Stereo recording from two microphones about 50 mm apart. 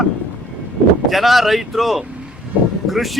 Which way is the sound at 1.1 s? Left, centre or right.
Centre.